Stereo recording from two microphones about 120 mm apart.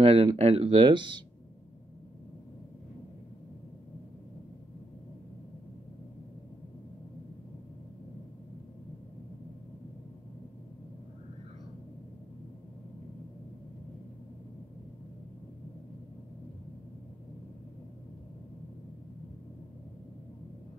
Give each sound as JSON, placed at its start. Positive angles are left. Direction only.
{"t": 0.0, "sound": "speech", "side_deg": -55}